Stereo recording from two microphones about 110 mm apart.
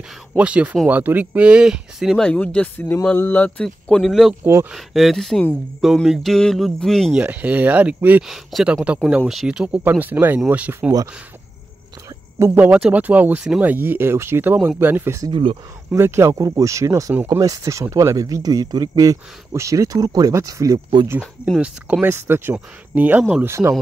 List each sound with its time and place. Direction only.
0.4 s speech: 10° right (ahead or behind)
2.2 s speech: 10° left (ahead or behind)
7.2 s speech: 15° right (ahead or behind)
8.2 s speech: centre (ahead or behind)
12.4 s speech: 20° right (ahead or behind); by 21.1 s 40° right (ahead or behind)
21.5 s speech: 10° right (ahead or behind)